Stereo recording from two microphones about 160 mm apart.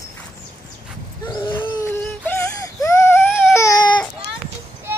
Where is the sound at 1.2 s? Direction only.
30° left (ahead or behind).